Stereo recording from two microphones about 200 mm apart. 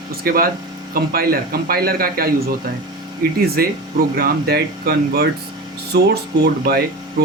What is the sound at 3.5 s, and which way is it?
Speech, 50° right (ahead or behind).